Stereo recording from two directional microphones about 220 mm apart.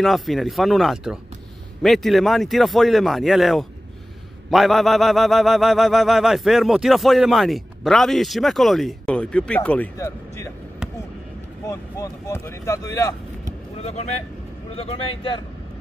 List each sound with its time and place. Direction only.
0.0 s a sound: centre (ahead or behind)
11.6 s speech: 15° left (ahead or behind)
13.7 s speech: 30° left (ahead or behind)